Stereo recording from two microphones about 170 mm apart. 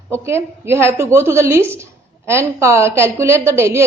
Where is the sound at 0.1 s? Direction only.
15° right (ahead or behind).